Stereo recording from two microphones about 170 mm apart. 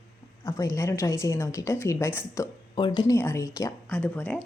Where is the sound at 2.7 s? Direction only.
25° left (ahead or behind).